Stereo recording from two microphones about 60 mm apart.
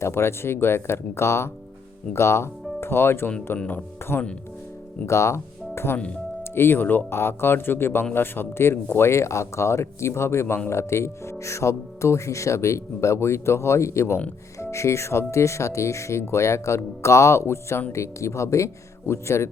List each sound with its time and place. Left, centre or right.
0.0 s speech: left
5.0 s speech: left